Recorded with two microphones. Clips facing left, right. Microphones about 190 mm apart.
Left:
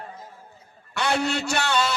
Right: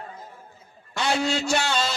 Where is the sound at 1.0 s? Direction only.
60° left (ahead or behind).